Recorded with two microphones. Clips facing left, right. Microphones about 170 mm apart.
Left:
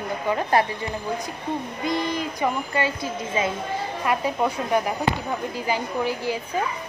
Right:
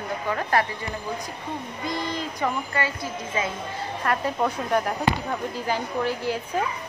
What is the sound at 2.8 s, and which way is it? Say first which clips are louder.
Speech: left 3 dB; 25° left (ahead or behind).